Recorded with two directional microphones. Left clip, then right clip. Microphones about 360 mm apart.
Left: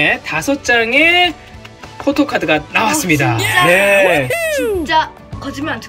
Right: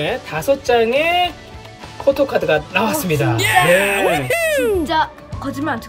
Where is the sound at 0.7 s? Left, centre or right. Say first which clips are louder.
Left 5 dB; left.